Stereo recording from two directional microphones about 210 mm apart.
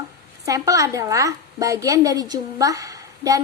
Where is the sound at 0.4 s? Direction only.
15° right (ahead or behind).